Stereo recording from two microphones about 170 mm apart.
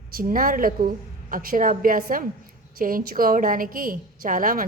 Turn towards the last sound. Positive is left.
turn(degrees=-55)  # may be behind; listen again after turning